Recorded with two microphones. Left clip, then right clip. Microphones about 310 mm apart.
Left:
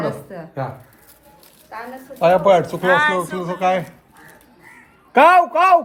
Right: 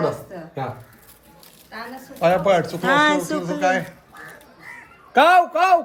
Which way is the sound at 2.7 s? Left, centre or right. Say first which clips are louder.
Left 1 dB; centre.